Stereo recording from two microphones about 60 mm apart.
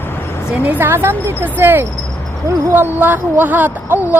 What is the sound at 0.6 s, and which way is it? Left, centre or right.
Speech, right.